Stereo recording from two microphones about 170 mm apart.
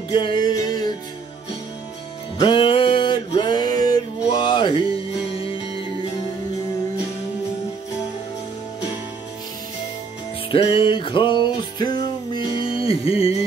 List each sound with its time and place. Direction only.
0.1 s music: 30° left (ahead or behind)
2.3 s music: 30° left (ahead or behind)
10.5 s music: 30° left (ahead or behind)